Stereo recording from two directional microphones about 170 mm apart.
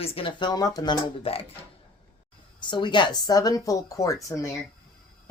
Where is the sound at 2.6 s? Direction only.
25° left (ahead or behind).